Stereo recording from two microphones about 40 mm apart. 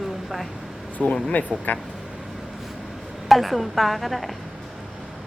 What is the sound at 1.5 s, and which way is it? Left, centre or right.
Speech, centre.